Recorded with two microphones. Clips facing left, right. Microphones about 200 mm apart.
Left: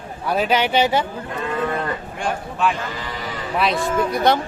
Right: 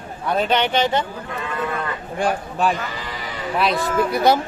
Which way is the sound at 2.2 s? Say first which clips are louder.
Right 2 dB; 35° right (ahead or behind).